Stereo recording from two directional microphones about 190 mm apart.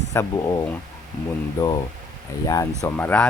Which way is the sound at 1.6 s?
25° left (ahead or behind).